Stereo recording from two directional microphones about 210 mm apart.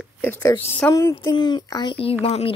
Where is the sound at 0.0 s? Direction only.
10° left (ahead or behind).